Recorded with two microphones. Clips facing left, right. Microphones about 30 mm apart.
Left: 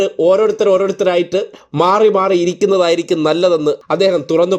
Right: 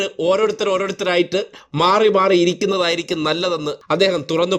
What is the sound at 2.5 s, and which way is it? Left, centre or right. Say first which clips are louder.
Speech: left 6 dB; centre.